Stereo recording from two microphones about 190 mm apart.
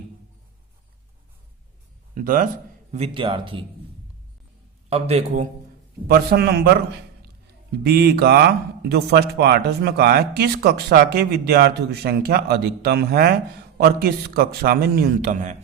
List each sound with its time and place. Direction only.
2.1 s a man's voice: 45° right (ahead or behind)
2.9 s speech: 30° right (ahead or behind)
4.9 s a man's voice: 35° right (ahead or behind)
6.1 s a man's voice: 55° right (ahead or behind); by 15.5 s 40° right (ahead or behind)